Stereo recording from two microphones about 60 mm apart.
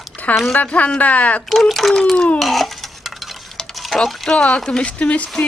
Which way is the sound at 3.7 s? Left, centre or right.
Centre.